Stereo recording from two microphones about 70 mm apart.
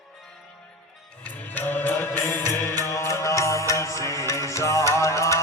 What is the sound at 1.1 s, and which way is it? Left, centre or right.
Music, centre.